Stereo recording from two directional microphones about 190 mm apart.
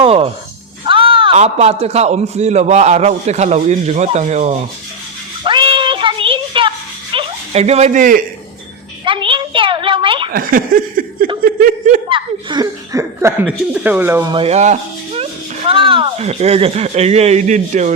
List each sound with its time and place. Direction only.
0.0 s music: 30° right (ahead or behind)
0.9 s a man's voice: 25° right (ahead or behind)
5.4 s music: 25° right (ahead or behind); by 8.2 s 45° right (ahead or behind)
9.0 s a sound: 25° right (ahead or behind)
10.3 s a sound: 45° right (ahead or behind)
12.0 s speech: 25° right (ahead or behind)
14.3 s a man's voice: 35° right (ahead or behind)